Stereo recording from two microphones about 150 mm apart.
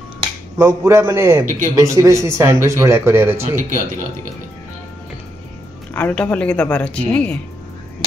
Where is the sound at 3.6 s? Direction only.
60° right (ahead or behind).